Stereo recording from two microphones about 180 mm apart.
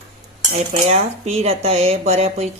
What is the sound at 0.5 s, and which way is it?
Speech, 40° right (ahead or behind).